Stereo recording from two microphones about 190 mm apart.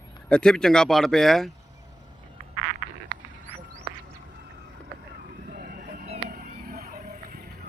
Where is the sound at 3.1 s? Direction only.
25° left (ahead or behind).